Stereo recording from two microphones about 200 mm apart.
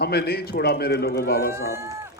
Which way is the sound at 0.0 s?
55° left (ahead or behind).